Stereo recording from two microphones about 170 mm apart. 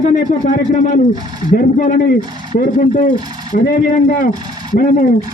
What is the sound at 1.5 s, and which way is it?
A man's voice, 55° left (ahead or behind).